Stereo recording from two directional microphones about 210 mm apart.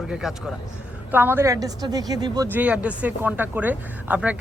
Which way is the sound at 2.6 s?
5° right (ahead or behind).